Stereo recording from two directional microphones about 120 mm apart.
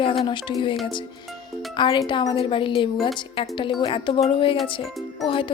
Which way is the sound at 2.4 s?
45° left (ahead or behind).